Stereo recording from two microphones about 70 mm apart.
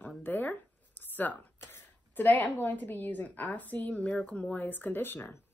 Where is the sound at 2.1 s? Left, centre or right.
Left.